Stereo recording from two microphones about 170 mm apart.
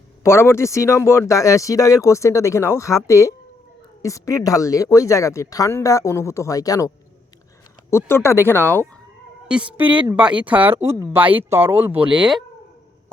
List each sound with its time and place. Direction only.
0.2 s speech: 15° left (ahead or behind)
9.5 s speech: 5° right (ahead or behind)